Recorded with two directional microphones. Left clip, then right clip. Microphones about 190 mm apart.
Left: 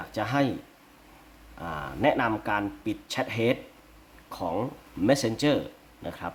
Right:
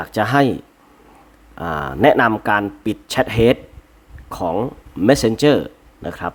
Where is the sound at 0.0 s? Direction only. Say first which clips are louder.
Right 11 dB; 45° right (ahead or behind).